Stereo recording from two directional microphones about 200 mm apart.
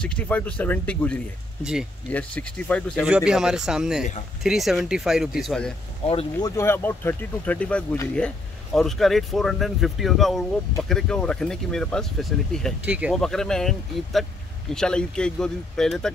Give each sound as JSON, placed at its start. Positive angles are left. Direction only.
{"t": 0.0, "sound": "speech", "side_deg": 5}
{"t": 6.0, "sound": "speech", "side_deg": 30}
{"t": 6.5, "sound": "speech", "side_deg": 10}